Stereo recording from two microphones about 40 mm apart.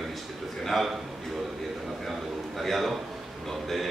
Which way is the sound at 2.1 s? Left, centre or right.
Centre.